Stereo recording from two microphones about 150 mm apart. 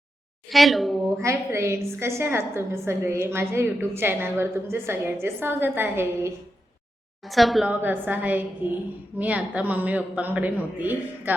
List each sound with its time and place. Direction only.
0.5 s speech: centre (ahead or behind)
1.2 s a woman's voice: 20° right (ahead or behind)
7.3 s a woman's voice: centre (ahead or behind)
7.8 s a woman's voice: 10° right (ahead or behind)